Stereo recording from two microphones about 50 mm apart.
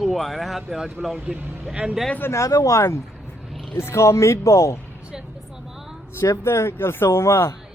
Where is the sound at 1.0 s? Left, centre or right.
Right.